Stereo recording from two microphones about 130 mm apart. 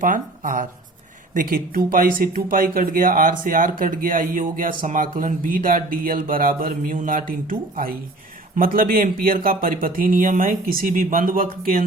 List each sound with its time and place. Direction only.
0.0 s speech: 90° right